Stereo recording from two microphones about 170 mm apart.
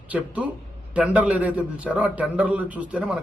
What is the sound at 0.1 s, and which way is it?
A man's voice, 10° right (ahead or behind).